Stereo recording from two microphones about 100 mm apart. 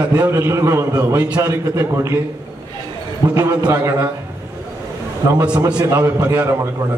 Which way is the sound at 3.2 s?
35° right (ahead or behind).